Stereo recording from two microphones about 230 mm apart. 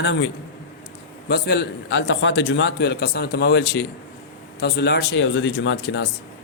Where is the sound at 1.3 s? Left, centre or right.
Left.